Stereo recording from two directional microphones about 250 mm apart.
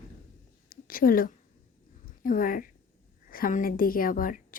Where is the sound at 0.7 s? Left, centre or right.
Left.